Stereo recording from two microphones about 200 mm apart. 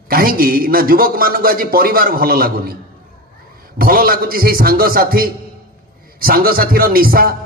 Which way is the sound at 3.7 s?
45° right (ahead or behind).